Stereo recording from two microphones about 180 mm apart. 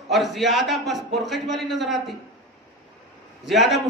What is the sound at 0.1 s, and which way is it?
A man's voice, centre (ahead or behind).